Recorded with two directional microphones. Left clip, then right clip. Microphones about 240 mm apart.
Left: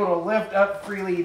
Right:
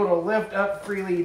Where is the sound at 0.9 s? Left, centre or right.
Left.